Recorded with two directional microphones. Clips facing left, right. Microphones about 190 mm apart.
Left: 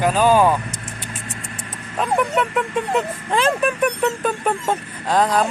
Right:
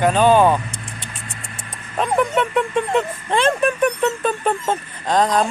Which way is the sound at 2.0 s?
Centre (ahead or behind).